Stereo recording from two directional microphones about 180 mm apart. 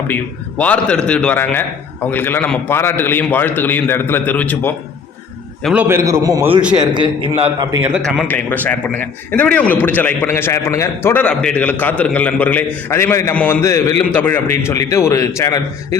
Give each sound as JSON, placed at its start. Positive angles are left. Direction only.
{"t": 0.6, "sound": "a man's voice", "side_deg": 5}
{"t": 5.6, "sound": "a man's voice", "side_deg": -10}
{"t": 6.6, "sound": "a man's voice", "side_deg": -5}
{"t": 6.9, "sound": "a man's voice", "side_deg": -25}
{"t": 8.2, "sound": "a man's voice", "side_deg": 10}